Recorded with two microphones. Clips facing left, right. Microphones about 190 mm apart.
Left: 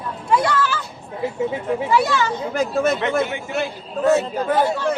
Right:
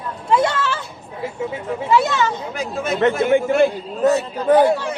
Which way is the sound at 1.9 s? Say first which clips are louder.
Right 3 dB; 20° right (ahead or behind).